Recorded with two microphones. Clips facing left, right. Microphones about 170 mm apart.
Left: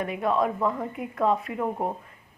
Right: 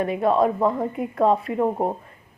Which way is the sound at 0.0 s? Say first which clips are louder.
Right 5 dB; 35° right (ahead or behind).